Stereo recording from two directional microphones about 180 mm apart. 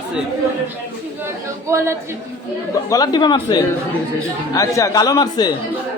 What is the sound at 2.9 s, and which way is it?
A man's voice, 20° left (ahead or behind).